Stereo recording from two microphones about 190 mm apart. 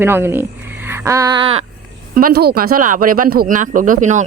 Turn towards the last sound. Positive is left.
turn(degrees=-40)  # may be behind; listen again after turning